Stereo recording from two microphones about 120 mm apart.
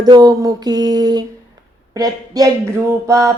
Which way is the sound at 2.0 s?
30° right (ahead or behind).